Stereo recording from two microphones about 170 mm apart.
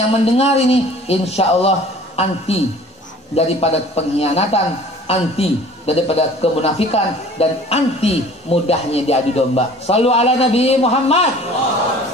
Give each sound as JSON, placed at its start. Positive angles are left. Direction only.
{"t": 0.2, "sound": "a man's voice", "side_deg": 35}